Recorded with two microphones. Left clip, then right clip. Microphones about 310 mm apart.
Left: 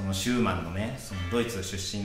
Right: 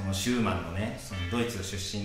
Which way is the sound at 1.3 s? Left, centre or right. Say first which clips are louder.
Left 3 dB; left.